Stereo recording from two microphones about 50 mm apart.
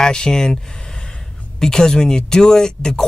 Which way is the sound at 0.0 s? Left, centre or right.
Centre.